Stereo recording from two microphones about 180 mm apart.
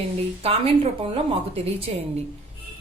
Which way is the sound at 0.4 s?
35° right (ahead or behind).